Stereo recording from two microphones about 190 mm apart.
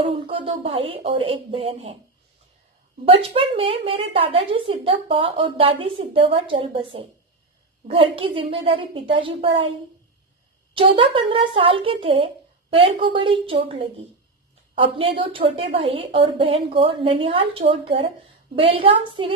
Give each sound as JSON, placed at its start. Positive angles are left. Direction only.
{"t": 0.0, "sound": "speech", "side_deg": -30}
{"t": 3.1, "sound": "a woman's voice", "side_deg": -30}
{"t": 10.7, "sound": "a woman's voice", "side_deg": -25}
{"t": 14.8, "sound": "a woman's voice", "side_deg": -30}